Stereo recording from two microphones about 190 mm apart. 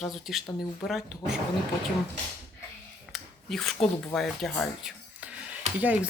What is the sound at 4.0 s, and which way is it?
Speech, 5° left (ahead or behind).